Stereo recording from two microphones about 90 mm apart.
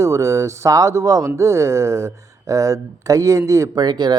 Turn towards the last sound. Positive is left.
turn(degrees=-50)  # may be behind; listen again after turning